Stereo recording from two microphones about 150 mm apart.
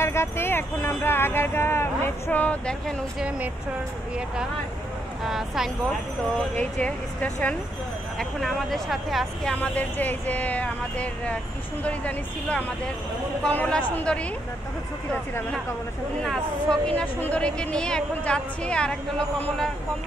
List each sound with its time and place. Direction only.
0.0 s speech: 15° left (ahead or behind)
3.2 s speech: 10° right (ahead or behind)
5.2 s speech: centre (ahead or behind)
6.5 s speech: 10° left (ahead or behind)
16.8 s speech: 10° left (ahead or behind)